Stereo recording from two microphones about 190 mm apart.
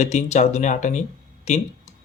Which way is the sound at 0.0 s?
40° left (ahead or behind).